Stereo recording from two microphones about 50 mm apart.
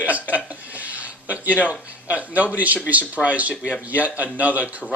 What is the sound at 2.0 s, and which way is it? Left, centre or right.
Speech, right.